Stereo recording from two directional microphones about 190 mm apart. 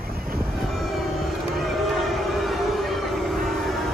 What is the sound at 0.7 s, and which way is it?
Train, centre (ahead or behind).